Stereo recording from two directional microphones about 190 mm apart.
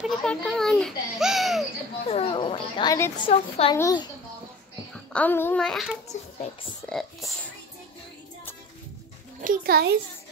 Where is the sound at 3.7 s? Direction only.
15° left (ahead or behind).